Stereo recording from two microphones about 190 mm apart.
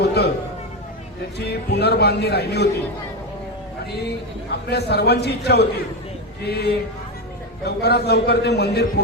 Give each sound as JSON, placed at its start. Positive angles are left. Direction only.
{"t": 0.0, "sound": "a sound", "side_deg": 60}
{"t": 1.4, "sound": "a man's voice", "side_deg": 60}
{"t": 4.7, "sound": "a man's voice", "side_deg": 60}